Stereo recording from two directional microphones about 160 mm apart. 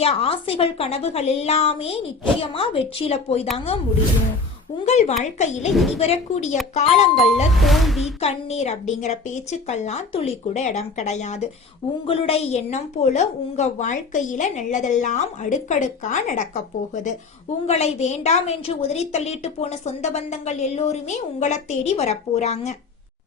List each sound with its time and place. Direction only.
0.0 s a woman's voice: 40° left (ahead or behind)
4.9 s a woman's voice: 45° left (ahead or behind)
5.7 s speech: centre (ahead or behind)
6.0 s a woman's voice: 40° left (ahead or behind)
7.6 s speech: centre (ahead or behind)
8.2 s a woman's voice: 40° left (ahead or behind)
17.7 s a woman's voice: 40° left (ahead or behind)